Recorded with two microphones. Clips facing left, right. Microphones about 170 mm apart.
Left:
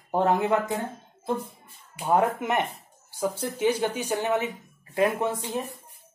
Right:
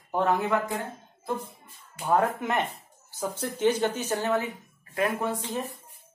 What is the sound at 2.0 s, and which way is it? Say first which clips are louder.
Speech: left 1 dB; 25° left (ahead or behind).